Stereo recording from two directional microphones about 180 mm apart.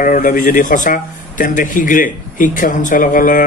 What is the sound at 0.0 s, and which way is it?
A man's voice, 50° left (ahead or behind).